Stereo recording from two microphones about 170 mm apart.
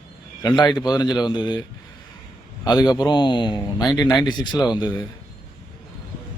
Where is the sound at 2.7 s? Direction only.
25° left (ahead or behind).